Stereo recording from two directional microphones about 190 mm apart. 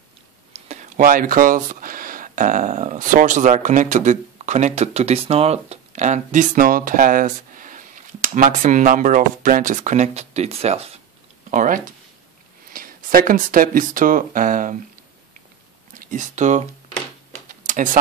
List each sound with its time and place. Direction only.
0.7 s speech: 40° right (ahead or behind)
11.5 s speech: 45° right (ahead or behind)
15.9 s speech: 45° right (ahead or behind)